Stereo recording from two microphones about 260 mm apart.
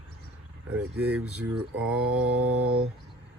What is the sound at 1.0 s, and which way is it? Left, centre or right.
Speech, right.